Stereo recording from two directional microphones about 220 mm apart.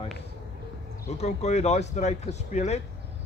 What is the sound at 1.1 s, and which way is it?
Speech, 30° left (ahead or behind).